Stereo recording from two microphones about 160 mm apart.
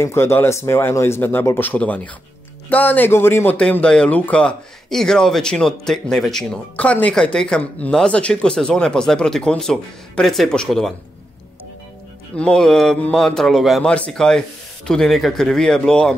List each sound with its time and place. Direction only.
0.0 s speech: 15° left (ahead or behind)
12.4 s speech: 5° left (ahead or behind)